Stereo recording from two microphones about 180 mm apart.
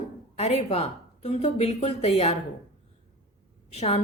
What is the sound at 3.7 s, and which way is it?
Speech, 35° left (ahead or behind).